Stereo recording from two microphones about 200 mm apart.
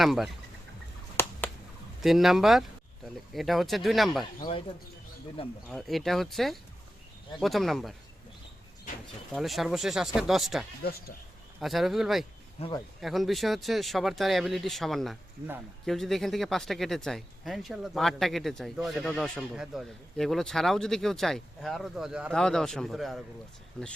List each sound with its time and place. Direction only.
0.0 s speech: centre (ahead or behind)
1.1 s finger snapping: 10° left (ahead or behind)
2.0 s speech: centre (ahead or behind)
5.6 s speech: centre (ahead or behind)
9.3 s speech: centre (ahead or behind)
12.5 s speech: 30° left (ahead or behind)
13.0 s speech: centre (ahead or behind)